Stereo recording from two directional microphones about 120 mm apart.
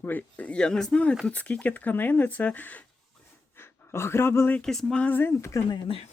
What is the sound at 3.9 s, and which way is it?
Speech, 20° left (ahead or behind).